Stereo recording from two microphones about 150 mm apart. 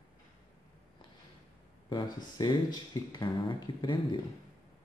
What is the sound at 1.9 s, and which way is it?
Speech, 30° left (ahead or behind).